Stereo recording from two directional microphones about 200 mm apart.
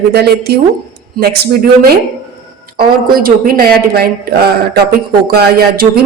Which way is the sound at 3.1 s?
45° right (ahead or behind).